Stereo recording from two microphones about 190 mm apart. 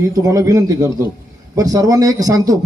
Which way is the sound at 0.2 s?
20° right (ahead or behind).